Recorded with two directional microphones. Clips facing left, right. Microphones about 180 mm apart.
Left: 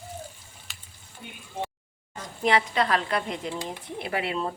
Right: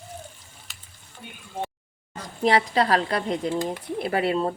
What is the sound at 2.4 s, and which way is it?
Speech, 35° right (ahead or behind).